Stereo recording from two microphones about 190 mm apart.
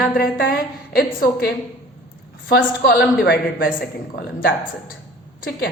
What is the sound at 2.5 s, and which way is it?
A woman's voice, 55° left (ahead or behind).